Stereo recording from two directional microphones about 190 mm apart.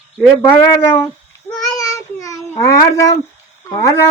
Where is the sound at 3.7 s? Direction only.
20° left (ahead or behind).